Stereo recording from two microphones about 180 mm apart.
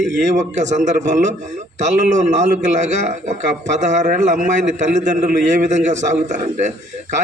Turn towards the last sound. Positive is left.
turn(degrees=-40)  # may be behind; listen again after turning